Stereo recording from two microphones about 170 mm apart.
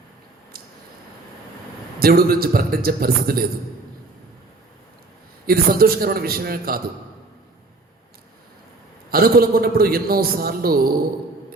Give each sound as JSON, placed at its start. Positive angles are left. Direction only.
{"t": 2.0, "sound": "a man's voice", "side_deg": -65}
{"t": 5.5, "sound": "a man's voice", "side_deg": -60}
{"t": 9.0, "sound": "a man's voice", "side_deg": -60}